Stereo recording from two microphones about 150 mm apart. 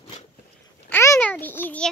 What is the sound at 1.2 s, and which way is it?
Speech, 10° left (ahead or behind).